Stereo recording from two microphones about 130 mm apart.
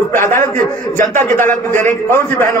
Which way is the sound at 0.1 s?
90° right.